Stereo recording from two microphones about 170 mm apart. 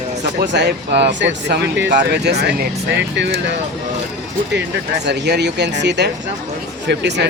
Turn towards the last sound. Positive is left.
turn(degrees=-85)